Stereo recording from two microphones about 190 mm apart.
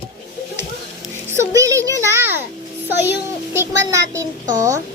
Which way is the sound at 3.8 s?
15° right (ahead or behind).